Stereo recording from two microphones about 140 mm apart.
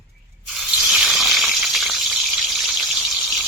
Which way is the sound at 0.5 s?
Centre (ahead or behind).